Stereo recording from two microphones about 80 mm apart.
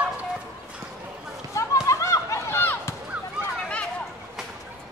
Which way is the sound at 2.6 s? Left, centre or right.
Left.